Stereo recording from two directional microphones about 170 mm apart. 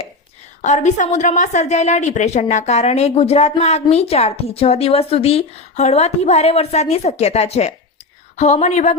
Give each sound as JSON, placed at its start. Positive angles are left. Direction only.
{"t": 0.6, "sound": "a woman's voice", "side_deg": 45}